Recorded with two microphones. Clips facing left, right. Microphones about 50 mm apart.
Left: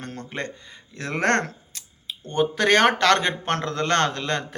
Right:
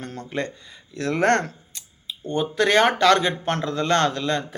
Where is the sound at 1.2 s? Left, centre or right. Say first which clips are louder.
Right 1 dB; left.